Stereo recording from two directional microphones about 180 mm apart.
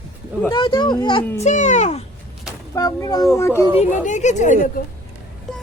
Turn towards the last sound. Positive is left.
turn(degrees=45)  # may be behind; listen again after turning